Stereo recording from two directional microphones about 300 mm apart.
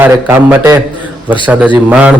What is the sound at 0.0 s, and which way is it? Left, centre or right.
A man's voice, centre.